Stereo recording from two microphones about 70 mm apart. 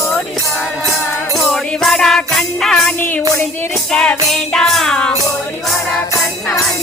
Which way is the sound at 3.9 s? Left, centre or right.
Centre.